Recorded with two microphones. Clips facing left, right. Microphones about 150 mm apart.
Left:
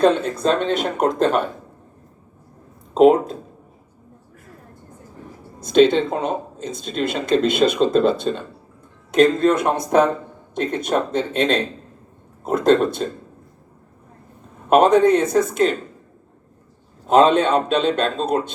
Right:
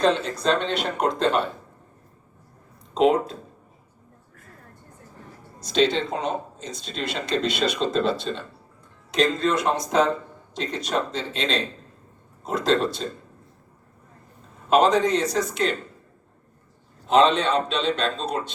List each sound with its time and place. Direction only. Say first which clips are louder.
0.0 s speech: left 5 dB; 55° left (ahead or behind)
2.9 s speech: left 6 dB; 50° left (ahead or behind)
5.5 s speech: left 7 dB; 55° left (ahead or behind)
14.7 s speech: left 5 dB; 55° left (ahead or behind)
17.1 s speech: left 4 dB; 50° left (ahead or behind)